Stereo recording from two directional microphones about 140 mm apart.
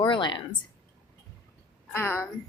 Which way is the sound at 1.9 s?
15° left (ahead or behind).